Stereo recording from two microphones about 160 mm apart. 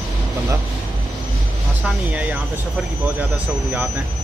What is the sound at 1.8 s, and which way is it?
Speech, 10° right (ahead or behind).